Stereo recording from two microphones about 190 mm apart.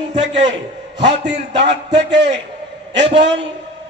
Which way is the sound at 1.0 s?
70° right (ahead or behind).